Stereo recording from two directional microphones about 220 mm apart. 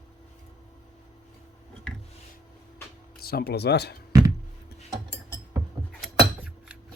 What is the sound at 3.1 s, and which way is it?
Speech, 45° left (ahead or behind).